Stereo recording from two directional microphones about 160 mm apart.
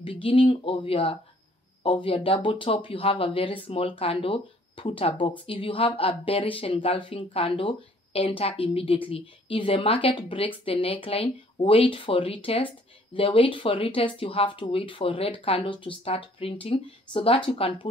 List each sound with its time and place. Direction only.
0.0 s a woman's voice: 35° left (ahead or behind)